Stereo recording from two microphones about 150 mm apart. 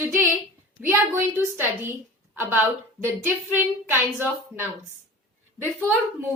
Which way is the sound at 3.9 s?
15° right (ahead or behind).